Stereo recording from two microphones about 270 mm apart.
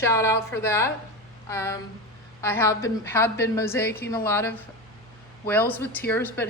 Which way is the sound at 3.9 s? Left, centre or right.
Left.